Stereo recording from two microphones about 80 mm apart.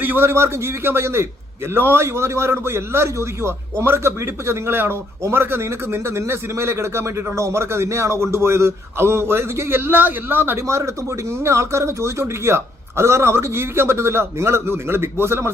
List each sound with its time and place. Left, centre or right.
0.0 s a man's voice: right